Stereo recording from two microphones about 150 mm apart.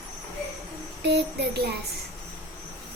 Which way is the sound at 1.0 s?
90° right.